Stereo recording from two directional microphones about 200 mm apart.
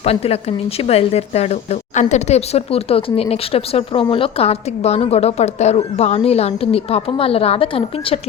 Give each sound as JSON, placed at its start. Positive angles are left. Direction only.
{"t": 0.0, "sound": "a woman's voice", "side_deg": 30}